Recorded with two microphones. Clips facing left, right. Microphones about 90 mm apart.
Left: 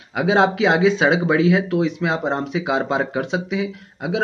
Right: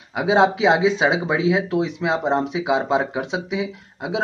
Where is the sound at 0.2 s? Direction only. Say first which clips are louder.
Even; 10° right (ahead or behind).